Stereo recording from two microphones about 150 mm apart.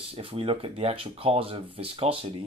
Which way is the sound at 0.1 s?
40° right (ahead or behind).